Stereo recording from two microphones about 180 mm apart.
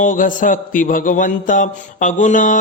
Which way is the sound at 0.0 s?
45° left (ahead or behind).